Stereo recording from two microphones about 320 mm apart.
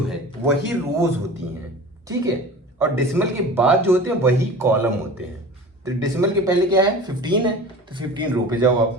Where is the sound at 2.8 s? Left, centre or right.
Centre.